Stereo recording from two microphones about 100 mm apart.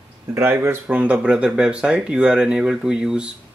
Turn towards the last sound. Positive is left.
turn(degrees=-10)  # may be behind; listen again after turning